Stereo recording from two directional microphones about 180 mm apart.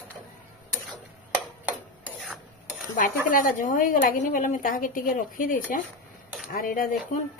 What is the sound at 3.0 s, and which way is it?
A woman's voice, 45° left (ahead or behind).